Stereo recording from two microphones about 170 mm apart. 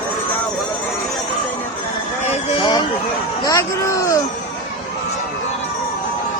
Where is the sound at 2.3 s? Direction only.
40° left (ahead or behind).